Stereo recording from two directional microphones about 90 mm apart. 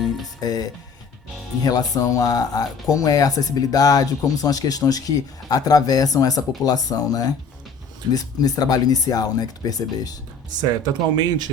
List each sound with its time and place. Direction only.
0.3 s speech: 45° left (ahead or behind)
10.8 s speech: 50° right (ahead or behind)